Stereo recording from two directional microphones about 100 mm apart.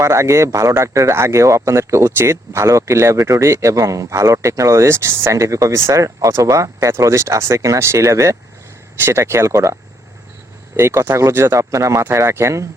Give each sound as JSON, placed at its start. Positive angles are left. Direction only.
{"t": 0.0, "sound": "speech", "side_deg": -30}
{"t": 10.8, "sound": "speech", "side_deg": -25}